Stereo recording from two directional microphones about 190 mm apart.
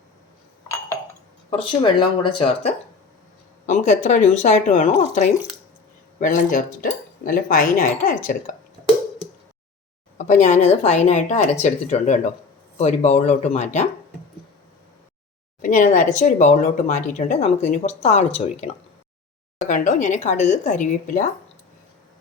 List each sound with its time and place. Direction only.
1.5 s speech: 30° left (ahead or behind)
3.7 s speech: 40° left (ahead or behind)
10.2 s speech: 40° left (ahead or behind)
15.6 s speech: 45° left (ahead or behind)